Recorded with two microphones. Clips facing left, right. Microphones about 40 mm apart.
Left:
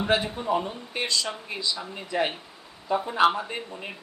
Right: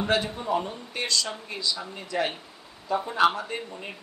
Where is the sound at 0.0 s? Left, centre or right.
Centre.